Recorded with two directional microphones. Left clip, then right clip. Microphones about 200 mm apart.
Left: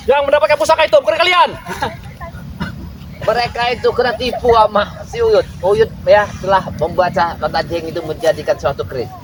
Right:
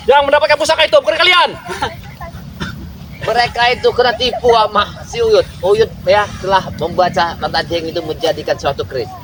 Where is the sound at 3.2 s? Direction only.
25° right (ahead or behind).